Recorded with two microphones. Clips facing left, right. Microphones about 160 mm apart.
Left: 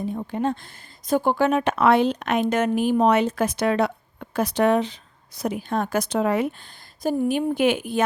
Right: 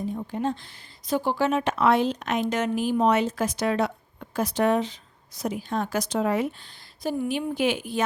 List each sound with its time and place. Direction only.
0.0 s speech: 60° left (ahead or behind)
7.0 s a woman's voice: 45° left (ahead or behind)